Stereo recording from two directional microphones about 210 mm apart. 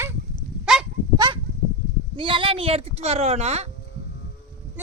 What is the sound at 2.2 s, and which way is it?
A woman's voice, 25° right (ahead or behind).